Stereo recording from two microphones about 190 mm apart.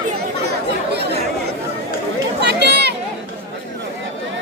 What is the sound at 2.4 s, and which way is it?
Chatter, 60° right (ahead or behind).